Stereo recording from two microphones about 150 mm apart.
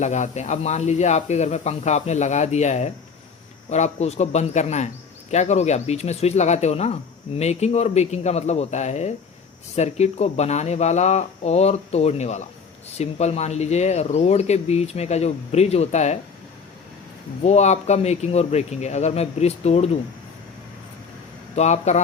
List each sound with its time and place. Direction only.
0.0 s speech: 50° left (ahead or behind)
17.4 s speech: 50° left (ahead or behind)
21.5 s speech: 50° left (ahead or behind)